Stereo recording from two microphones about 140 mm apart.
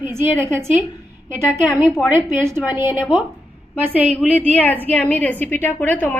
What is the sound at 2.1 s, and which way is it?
A woman's voice, 15° right (ahead or behind).